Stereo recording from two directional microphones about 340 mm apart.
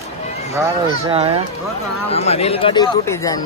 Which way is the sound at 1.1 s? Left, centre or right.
Centre.